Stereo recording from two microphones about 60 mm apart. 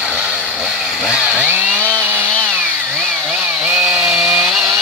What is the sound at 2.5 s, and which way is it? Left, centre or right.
Chainsaw, centre.